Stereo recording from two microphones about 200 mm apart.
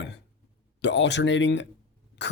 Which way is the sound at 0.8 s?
60° left (ahead or behind).